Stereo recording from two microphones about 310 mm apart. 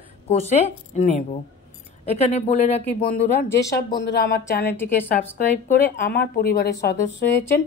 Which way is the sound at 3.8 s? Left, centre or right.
Left.